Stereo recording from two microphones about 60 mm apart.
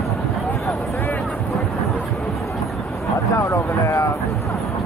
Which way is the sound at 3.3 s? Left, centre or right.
Left.